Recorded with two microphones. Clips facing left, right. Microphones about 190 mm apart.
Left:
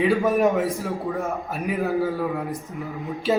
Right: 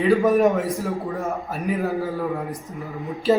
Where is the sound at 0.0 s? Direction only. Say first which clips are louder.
Right 2 dB; centre (ahead or behind).